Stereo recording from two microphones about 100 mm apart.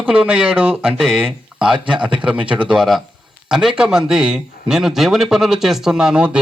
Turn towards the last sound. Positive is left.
turn(degrees=-10)  # may be behind; listen again after turning